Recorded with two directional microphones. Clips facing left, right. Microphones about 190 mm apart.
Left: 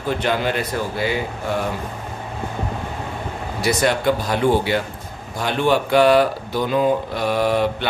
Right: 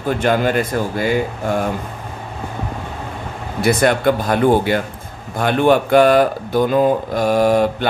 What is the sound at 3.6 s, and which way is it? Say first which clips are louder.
Speech: right 4 dB; 55° right (ahead or behind).